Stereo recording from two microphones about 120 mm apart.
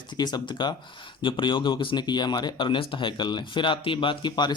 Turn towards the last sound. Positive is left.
turn(degrees=40)  # may be behind; listen again after turning